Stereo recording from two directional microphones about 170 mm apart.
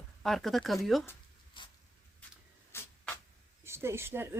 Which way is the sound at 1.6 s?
30° left (ahead or behind).